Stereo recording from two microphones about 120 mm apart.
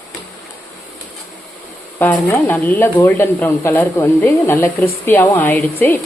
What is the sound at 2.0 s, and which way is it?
Speech, 15° left (ahead or behind).